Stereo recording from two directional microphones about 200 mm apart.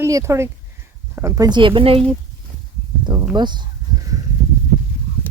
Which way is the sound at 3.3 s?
20° right (ahead or behind).